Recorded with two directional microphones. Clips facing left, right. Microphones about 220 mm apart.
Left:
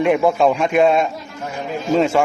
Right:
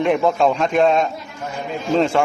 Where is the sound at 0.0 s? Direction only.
5° left (ahead or behind).